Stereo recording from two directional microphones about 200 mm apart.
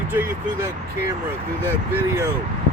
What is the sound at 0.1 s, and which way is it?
Speech, 10° right (ahead or behind).